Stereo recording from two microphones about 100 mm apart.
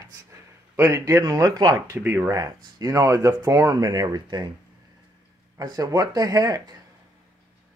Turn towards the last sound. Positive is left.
turn(degrees=-40)  # may be behind; listen again after turning